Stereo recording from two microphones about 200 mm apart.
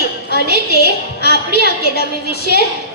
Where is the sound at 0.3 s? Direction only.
55° left (ahead or behind).